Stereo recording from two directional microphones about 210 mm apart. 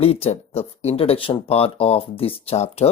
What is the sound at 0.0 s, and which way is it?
Speech, 30° left (ahead or behind).